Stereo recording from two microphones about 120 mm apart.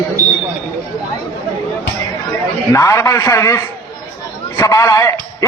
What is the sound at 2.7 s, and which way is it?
A man's voice, 25° left (ahead or behind).